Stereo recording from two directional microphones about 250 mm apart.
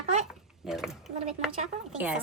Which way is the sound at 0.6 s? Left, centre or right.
Centre.